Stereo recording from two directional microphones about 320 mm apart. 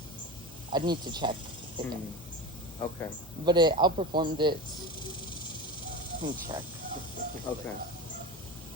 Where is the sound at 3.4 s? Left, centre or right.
Centre.